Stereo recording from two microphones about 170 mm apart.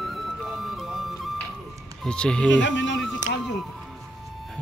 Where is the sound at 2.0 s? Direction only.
5° left (ahead or behind).